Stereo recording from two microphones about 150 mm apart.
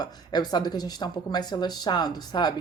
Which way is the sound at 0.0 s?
25° left (ahead or behind).